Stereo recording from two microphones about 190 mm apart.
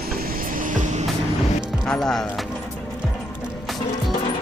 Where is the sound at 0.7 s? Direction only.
40° right (ahead or behind).